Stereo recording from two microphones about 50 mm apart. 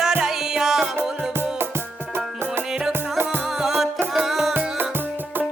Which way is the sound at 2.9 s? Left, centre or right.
Right.